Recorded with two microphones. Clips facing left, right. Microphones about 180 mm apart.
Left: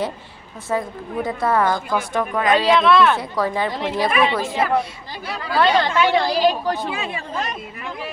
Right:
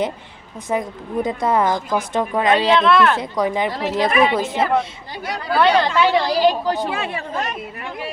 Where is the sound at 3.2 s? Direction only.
20° right (ahead or behind).